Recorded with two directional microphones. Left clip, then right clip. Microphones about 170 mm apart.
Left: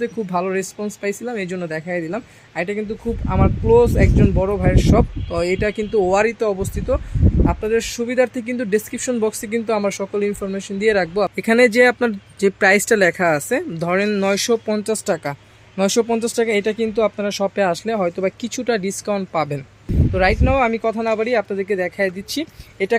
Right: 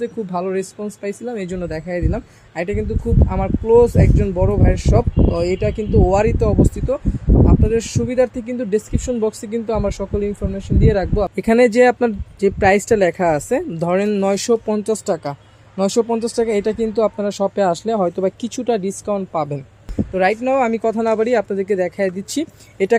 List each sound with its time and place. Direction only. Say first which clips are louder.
0.0 s speech: left 1 dB; 5° right (ahead or behind)
11.3 s speech: right 1 dB; 20° right (ahead or behind)
20.1 s speech: right 1 dB; 25° right (ahead or behind); by 23.0 s 40° right (ahead or behind)